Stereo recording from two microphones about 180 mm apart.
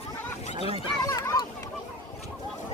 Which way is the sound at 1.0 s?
20° left (ahead or behind).